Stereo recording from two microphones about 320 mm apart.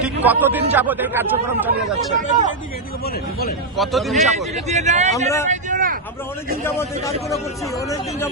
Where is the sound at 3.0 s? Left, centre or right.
Left.